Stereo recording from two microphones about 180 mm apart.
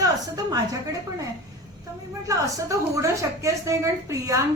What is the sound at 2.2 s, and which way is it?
A woman's voice, 20° right (ahead or behind).